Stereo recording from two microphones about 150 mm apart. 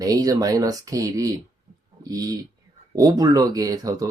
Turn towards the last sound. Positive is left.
turn(degrees=-25)  # may be behind; listen again after turning